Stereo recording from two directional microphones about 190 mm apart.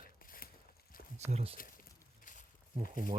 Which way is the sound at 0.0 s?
50° left (ahead or behind).